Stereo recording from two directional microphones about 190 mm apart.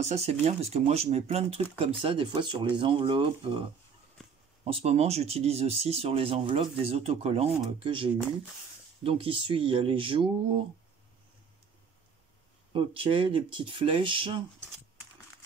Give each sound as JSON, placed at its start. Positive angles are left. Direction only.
{"t": 0.0, "sound": "speech", "side_deg": -35}
{"t": 4.6, "sound": "speech", "side_deg": -30}
{"t": 12.7, "sound": "speech", "side_deg": -30}